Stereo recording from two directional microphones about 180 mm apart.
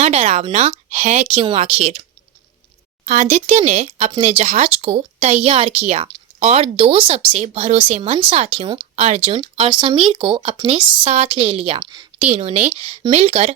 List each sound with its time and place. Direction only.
0.0 s speech: 35° right (ahead or behind)
3.1 s speech: 40° right (ahead or behind); by 12.0 s 25° right (ahead or behind)
12.2 s speech: 35° right (ahead or behind)